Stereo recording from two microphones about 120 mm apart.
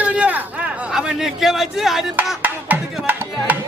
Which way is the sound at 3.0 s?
15° right (ahead or behind).